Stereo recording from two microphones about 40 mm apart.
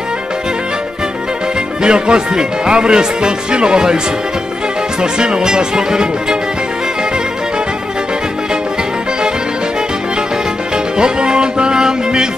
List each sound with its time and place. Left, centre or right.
1.8 s speech: right
5.0 s speech: right
11.0 s music: right